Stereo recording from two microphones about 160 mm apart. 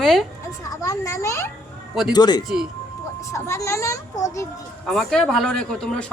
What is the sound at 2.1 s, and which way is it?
A child's voice, 25° left (ahead or behind).